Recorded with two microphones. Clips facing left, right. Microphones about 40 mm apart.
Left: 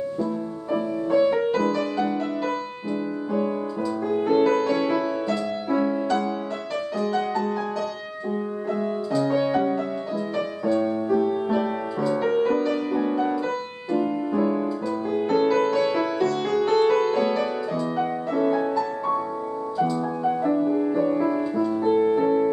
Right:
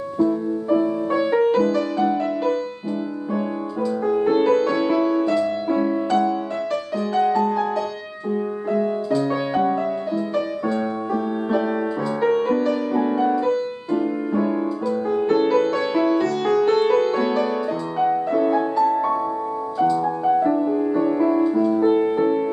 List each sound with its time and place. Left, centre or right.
1.1 s music: centre
1.6 s music: centre
4.3 s music: centre
7.0 s music: centre
8.7 s music: centre